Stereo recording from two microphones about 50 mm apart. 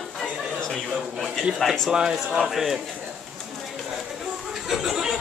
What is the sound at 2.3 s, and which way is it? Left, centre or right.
Speech, centre.